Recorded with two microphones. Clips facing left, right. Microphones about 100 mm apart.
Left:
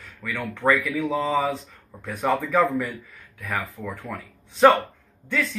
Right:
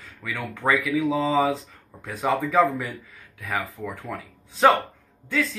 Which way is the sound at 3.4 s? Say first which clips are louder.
Even; 20° right (ahead or behind).